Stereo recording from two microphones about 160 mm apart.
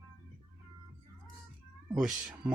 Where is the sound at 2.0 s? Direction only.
Centre (ahead or behind).